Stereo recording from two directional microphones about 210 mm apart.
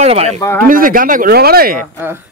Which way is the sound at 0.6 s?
40° right (ahead or behind).